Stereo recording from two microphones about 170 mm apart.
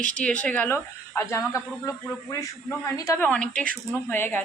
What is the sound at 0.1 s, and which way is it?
A woman's voice, 5° left (ahead or behind).